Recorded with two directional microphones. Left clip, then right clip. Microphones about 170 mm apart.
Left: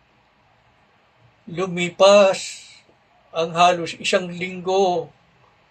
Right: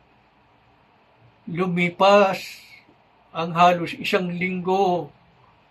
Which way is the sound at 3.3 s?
45° left (ahead or behind).